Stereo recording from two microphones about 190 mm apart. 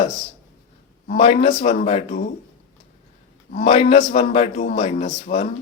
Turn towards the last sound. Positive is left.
turn(degrees=35)  # may be behind; listen again after turning